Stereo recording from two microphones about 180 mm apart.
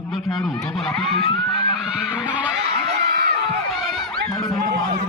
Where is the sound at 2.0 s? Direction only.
5° right (ahead or behind).